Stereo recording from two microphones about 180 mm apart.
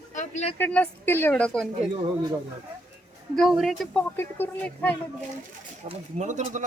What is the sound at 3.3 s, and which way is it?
A child's voice, centre (ahead or behind).